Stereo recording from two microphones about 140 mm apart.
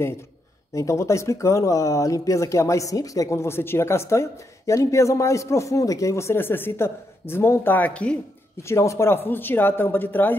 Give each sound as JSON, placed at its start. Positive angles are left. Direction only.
{"t": 0.7, "sound": "speech", "side_deg": 20}
{"t": 8.6, "sound": "speech", "side_deg": 20}